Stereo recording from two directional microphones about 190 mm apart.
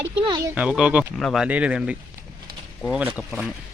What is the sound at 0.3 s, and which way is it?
Speech, 20° right (ahead or behind).